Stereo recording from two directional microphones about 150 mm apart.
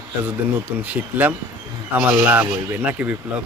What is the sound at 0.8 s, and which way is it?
Speech, 10° right (ahead or behind).